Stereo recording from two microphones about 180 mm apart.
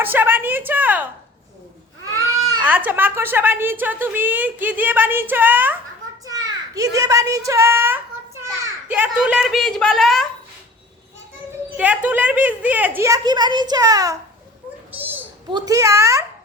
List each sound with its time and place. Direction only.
0.0 s a sound: 10° right (ahead or behind)
2.1 s babbling: 20° right (ahead or behind)
2.6 s a woman's voice: 10° right (ahead or behind)
6.2 s a child's voice: 20° right (ahead or behind); by 10.2 s centre (ahead or behind)
11.8 s a woman's voice: 10° right (ahead or behind)
15.4 s a woman's voice: 20° right (ahead or behind)